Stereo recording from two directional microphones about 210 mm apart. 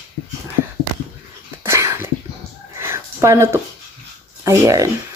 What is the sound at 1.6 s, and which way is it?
Dog, 15° right (ahead or behind).